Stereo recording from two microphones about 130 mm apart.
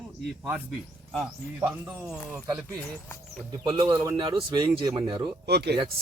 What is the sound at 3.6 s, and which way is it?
Speech, 40° right (ahead or behind).